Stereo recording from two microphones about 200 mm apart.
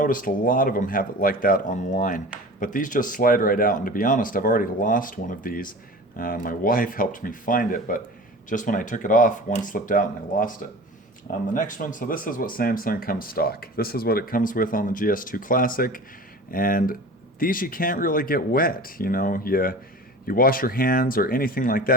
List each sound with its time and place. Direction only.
0.0 s speech: 45° left (ahead or behind)